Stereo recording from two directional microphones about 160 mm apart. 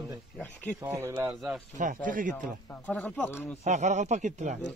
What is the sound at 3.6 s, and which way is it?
Speech, 45° right (ahead or behind).